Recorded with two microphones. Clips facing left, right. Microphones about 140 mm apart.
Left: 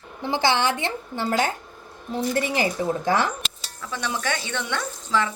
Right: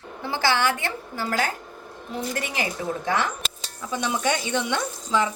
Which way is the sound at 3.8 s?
20° right (ahead or behind).